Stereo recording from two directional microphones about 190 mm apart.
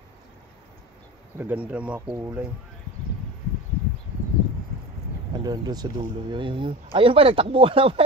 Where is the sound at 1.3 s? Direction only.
10° right (ahead or behind).